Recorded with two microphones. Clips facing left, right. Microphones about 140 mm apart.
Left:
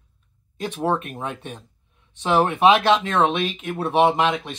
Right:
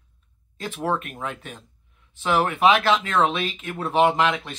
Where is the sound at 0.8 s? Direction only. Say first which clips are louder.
Left 2 dB; 20° left (ahead or behind).